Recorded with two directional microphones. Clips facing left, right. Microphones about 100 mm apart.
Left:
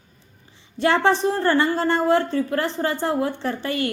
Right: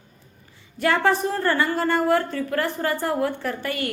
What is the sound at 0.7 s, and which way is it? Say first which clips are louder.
A woman's voice: left 2 dB; 25° left (ahead or behind).